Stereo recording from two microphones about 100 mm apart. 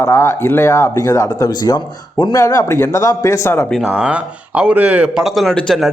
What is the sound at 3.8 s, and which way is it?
Speech, 10° right (ahead or behind).